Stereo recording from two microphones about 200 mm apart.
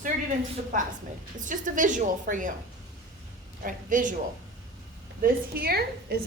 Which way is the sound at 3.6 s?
40° right (ahead or behind).